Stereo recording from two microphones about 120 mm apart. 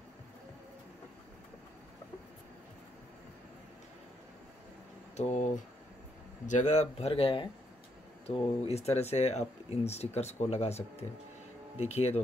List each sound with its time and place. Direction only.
5.1 s speech: 75° left (ahead or behind)